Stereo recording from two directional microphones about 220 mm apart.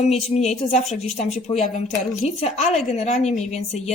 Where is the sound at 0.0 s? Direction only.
30° left (ahead or behind).